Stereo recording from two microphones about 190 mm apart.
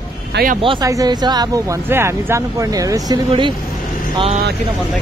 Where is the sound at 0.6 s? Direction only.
20° right (ahead or behind).